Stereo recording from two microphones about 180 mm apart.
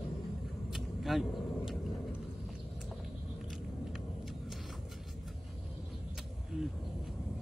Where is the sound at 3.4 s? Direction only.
Centre (ahead or behind).